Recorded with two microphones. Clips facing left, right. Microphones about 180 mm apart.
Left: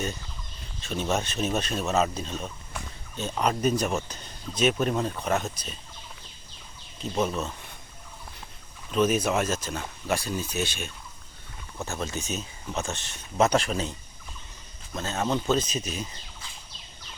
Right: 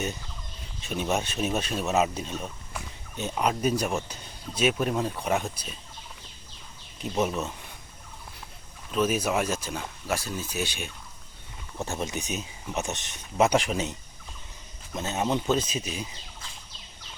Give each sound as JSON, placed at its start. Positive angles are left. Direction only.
{"t": 0.8, "sound": "speech", "side_deg": -15}
{"t": 7.0, "sound": "speech", "side_deg": -15}
{"t": 8.9, "sound": "speech", "side_deg": -5}
{"t": 14.9, "sound": "speech", "side_deg": -15}